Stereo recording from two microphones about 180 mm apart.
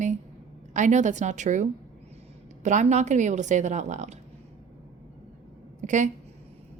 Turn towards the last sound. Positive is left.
turn(degrees=-40)  # may be behind; listen again after turning